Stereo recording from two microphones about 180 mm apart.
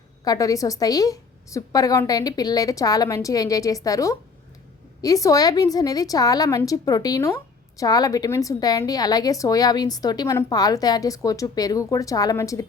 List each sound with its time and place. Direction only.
0.3 s a woman's voice: 20° left (ahead or behind)